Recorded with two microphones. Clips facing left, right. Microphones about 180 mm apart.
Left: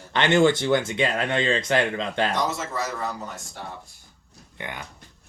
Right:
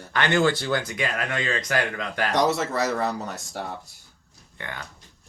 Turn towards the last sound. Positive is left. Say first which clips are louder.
# left 1 dB
turn(degrees=15)  # may be behind; listen again after turning